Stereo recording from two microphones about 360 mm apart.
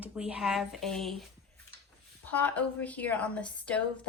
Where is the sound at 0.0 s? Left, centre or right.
Centre.